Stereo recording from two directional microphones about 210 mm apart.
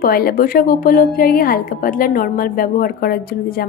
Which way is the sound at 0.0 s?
45° left (ahead or behind).